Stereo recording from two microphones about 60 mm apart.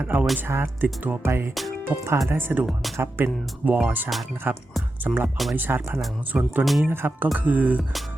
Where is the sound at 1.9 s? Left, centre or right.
Right.